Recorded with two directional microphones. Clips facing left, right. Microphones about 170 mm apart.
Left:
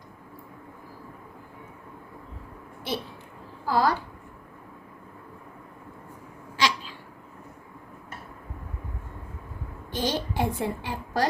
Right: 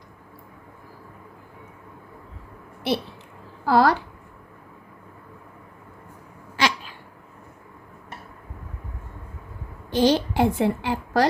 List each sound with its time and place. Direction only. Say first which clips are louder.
3.7 s a woman's voice: right 5 dB; 75° right (ahead or behind)
6.6 s a sound: right 2 dB; 55° right (ahead or behind)
9.9 s a woman's voice: right 9 dB; 80° right